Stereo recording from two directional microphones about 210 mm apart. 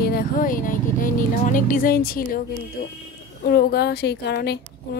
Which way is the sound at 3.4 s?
50° left (ahead or behind).